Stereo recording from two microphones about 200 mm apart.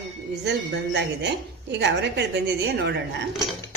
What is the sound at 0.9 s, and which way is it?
A woman's voice, 60° right (ahead or behind).